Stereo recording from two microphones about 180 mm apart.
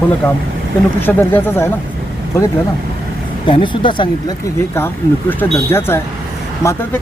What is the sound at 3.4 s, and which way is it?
Speech, 30° left (ahead or behind).